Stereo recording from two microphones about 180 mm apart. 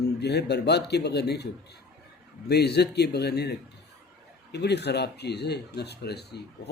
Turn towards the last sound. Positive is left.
turn(degrees=65)  # may be behind; listen again after turning